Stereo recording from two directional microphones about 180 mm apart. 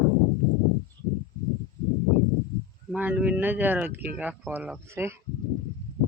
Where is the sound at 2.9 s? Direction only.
5° right (ahead or behind).